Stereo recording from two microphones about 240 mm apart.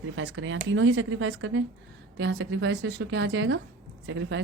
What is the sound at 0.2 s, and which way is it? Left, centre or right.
Speech, right.